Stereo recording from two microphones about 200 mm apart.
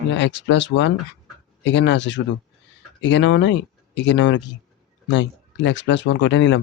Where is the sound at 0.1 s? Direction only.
65° left (ahead or behind).